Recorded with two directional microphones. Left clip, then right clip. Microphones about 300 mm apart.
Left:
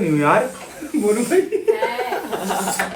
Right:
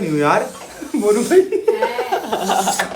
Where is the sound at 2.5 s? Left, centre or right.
Centre.